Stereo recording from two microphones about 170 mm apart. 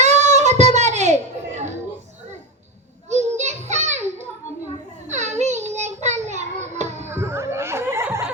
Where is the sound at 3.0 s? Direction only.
40° right (ahead or behind).